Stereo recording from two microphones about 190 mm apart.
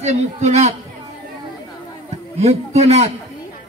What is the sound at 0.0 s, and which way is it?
Speech, 35° right (ahead or behind).